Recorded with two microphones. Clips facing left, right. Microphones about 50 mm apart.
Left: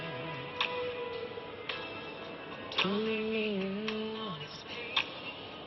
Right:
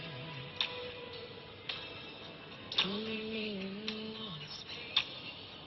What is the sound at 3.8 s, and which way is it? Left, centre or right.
Music, left.